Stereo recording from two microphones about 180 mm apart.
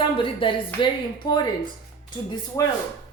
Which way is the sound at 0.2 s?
30° left (ahead or behind).